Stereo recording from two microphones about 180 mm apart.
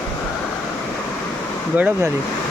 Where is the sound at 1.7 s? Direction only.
10° right (ahead or behind).